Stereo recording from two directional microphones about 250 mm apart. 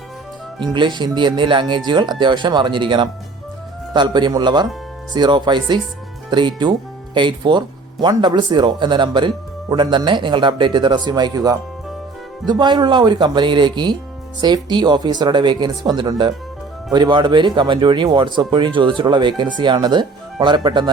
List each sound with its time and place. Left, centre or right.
0.6 s speech: centre